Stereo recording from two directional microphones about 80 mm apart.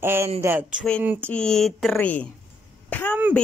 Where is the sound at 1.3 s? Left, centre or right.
Centre.